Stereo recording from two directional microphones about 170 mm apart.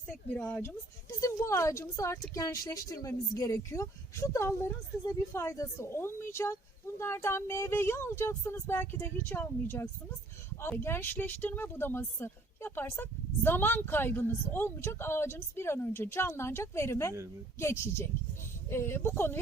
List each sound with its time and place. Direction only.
0.3 s speech: 10° left (ahead or behind)